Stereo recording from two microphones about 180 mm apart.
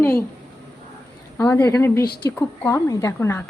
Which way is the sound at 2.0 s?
60° left (ahead or behind).